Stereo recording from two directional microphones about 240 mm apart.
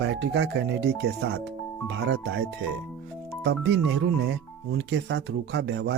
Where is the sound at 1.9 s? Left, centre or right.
Right.